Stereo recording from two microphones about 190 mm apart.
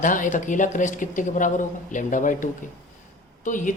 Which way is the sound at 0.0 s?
40° left (ahead or behind).